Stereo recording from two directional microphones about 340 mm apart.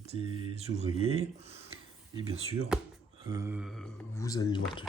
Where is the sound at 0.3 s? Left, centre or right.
Centre.